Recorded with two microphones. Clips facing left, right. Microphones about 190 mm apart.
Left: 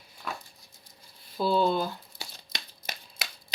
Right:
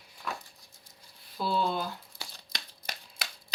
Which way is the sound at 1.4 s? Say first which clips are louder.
Left 5 dB; 30° left (ahead or behind).